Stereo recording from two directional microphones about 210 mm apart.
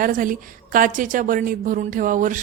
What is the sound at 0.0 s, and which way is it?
A woman's voice, 40° right (ahead or behind).